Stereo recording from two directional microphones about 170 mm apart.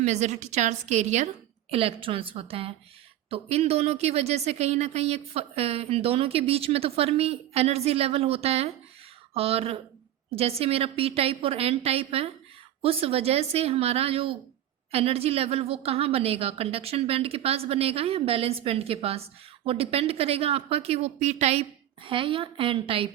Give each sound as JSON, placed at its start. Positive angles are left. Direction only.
{"t": 0.0, "sound": "a woman's voice", "side_deg": -40}